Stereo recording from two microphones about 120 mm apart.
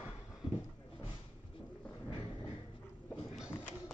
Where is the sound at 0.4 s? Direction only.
45° left (ahead or behind).